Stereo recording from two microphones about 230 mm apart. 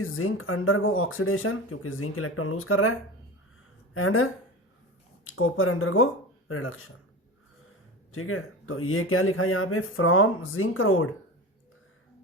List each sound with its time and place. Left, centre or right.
0.0 s speech: left
3.9 s speech: left
8.1 s speech: left